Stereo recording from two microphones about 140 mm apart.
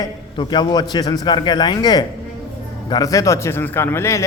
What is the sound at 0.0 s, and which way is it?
A man's voice, 30° left (ahead or behind).